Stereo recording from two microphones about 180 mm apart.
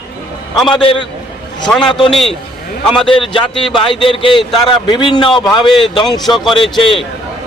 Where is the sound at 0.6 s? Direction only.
Centre (ahead or behind).